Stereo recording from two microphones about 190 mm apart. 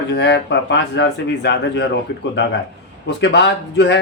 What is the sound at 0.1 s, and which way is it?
Speech, 65° left (ahead or behind).